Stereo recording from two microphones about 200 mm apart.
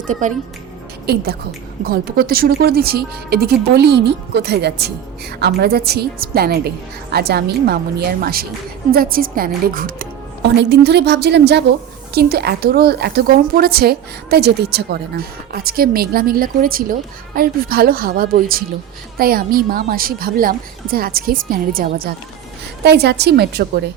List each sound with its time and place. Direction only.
0.1 s speech: 40° right (ahead or behind)
1.0 s a woman's voice: 50° right (ahead or behind)
10.6 s a woman's voice: 55° right (ahead or behind)